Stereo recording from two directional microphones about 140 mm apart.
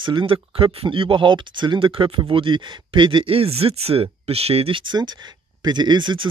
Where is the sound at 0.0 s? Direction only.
35° right (ahead or behind).